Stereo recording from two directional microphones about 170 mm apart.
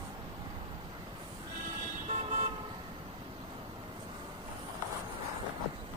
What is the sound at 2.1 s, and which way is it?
Vehicle, 40° right (ahead or behind).